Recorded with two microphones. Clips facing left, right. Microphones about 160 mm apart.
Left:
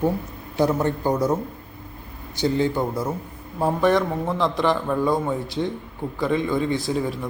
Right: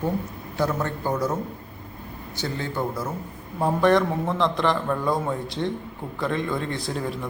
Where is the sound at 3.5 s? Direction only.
Centre (ahead or behind).